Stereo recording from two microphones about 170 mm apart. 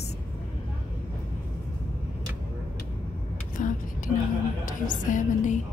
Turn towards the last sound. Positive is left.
turn(degrees=50)  # may be behind; listen again after turning